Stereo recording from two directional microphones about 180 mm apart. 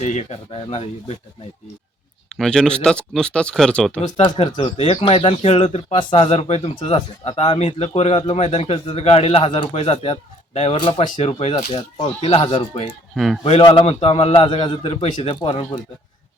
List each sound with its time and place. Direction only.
0.0 s speech: 40° left (ahead or behind)
2.3 s speech: 5° left (ahead or behind)
4.0 s speech: 25° left (ahead or behind)
6.6 s speech: 25° left (ahead or behind)
13.1 s speech: centre (ahead or behind)
13.4 s speech: 30° left (ahead or behind)